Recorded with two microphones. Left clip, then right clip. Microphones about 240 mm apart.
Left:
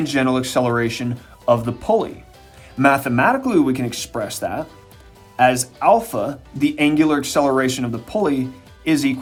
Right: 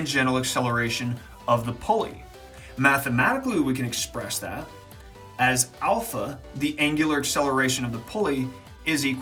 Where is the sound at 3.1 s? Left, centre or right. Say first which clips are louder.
Left 6 dB; centre.